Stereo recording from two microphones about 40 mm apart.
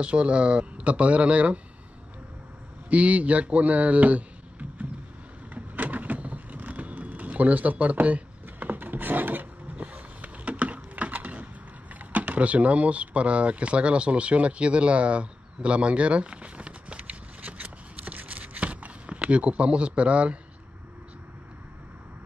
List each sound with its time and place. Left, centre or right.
0.0 s speech: right
2.9 s speech: right
5.5 s vehicle: right
9.8 s a sound: right